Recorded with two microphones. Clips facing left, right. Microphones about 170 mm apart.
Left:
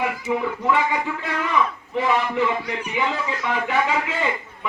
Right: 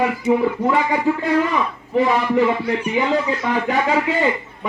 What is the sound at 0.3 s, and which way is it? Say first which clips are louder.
A man's voice: right 5 dB; 40° right (ahead or behind).